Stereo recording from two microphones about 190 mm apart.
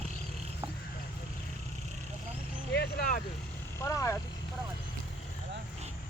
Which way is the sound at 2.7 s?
55° left (ahead or behind).